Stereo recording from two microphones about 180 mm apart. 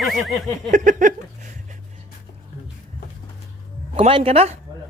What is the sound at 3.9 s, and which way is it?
Speech, 30° right (ahead or behind).